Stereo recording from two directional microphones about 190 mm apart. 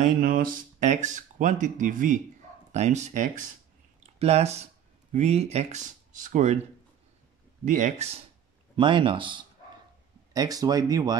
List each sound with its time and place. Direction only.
0.0 s speech: 45° right (ahead or behind)
7.6 s speech: 40° right (ahead or behind)
8.7 s speech: 25° right (ahead or behind)